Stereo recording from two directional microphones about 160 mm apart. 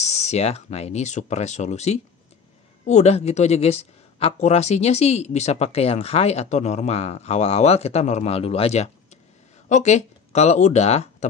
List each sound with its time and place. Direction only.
0.0 s speech: 45° left (ahead or behind)